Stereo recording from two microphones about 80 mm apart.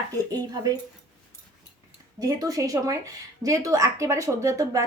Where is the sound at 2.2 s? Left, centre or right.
Right.